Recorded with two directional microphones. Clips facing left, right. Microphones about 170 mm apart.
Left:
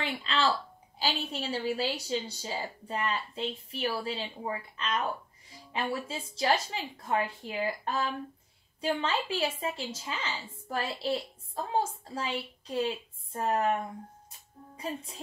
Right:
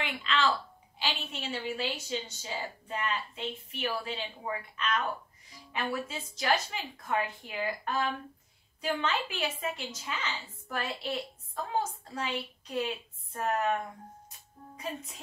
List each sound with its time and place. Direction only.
0.0 s a woman's voice: 35° left (ahead or behind)
14.8 s a woman's voice: 30° left (ahead or behind)